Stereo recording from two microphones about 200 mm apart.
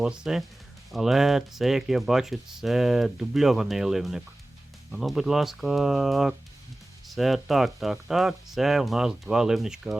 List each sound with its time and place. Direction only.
0.0 s speech: 5° right (ahead or behind)